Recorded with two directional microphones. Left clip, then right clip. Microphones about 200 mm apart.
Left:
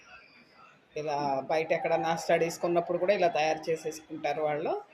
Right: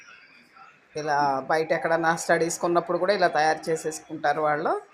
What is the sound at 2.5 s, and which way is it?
Speech, 30° right (ahead or behind).